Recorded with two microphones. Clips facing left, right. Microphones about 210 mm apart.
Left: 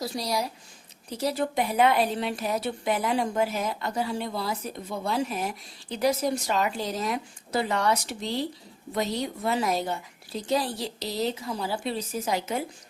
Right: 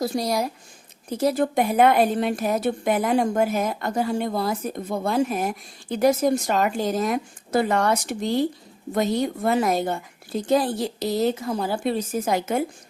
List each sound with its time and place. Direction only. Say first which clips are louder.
0.0 s a woman's voice: right 6 dB; 50° right (ahead or behind)